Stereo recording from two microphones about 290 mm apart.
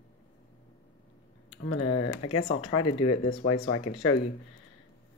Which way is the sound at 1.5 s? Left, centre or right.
Left.